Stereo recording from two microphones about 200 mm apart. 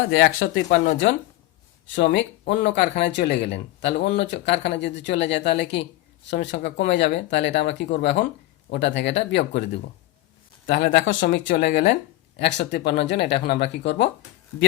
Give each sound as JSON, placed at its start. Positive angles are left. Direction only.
{"t": 0.1, "sound": "speech", "side_deg": 85}
{"t": 2.0, "sound": "speech", "side_deg": 60}
{"t": 10.7, "sound": "speech", "side_deg": 60}